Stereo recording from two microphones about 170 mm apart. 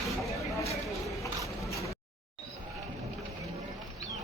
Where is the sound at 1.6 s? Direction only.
20° left (ahead or behind).